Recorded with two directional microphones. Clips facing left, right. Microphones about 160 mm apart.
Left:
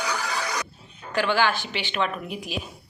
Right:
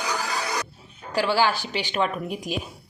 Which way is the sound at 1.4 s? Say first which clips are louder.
Right 1 dB; 35° right (ahead or behind).